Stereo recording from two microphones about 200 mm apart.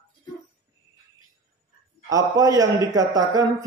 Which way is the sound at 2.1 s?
15° right (ahead or behind).